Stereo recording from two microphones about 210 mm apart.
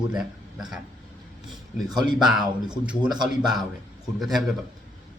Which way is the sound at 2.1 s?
Centre (ahead or behind).